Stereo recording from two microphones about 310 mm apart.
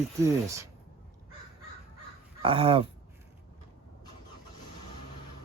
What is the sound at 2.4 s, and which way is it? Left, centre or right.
Speech, centre.